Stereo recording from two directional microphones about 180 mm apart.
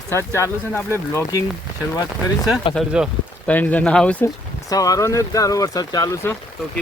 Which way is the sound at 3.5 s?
10° left (ahead or behind).